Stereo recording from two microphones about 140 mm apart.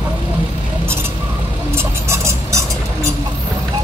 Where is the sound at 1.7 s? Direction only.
20° right (ahead or behind).